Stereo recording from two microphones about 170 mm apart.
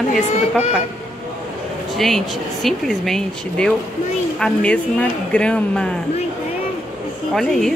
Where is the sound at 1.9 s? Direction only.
Centre (ahead or behind).